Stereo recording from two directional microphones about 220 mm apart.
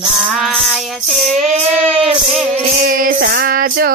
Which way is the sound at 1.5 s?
25° right (ahead or behind).